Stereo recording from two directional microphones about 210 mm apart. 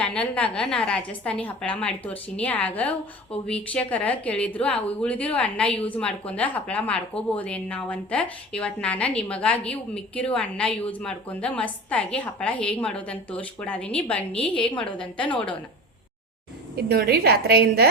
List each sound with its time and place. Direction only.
0.0 s a woman's voice: 5° left (ahead or behind)
16.7 s a woman's voice: 50° right (ahead or behind)